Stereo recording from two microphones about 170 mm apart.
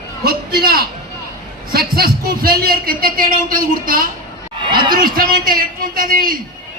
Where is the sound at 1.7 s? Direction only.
65° right (ahead or behind).